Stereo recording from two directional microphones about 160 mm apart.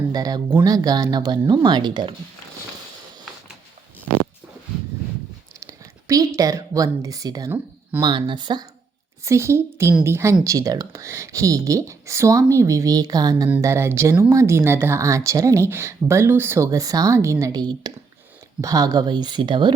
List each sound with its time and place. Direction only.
0.1 s speech: 25° right (ahead or behind)
5.5 s a woman's voice: 20° right (ahead or behind)
9.2 s speech: 15° right (ahead or behind)